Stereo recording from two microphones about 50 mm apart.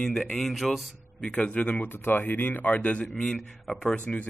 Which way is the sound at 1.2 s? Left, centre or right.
Left.